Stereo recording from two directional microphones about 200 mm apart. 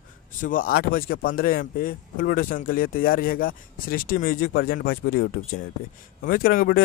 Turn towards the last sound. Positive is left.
turn(degrees=45)  # may be behind; listen again after turning